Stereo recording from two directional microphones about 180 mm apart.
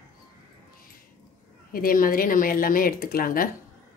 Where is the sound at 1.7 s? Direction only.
50° left (ahead or behind).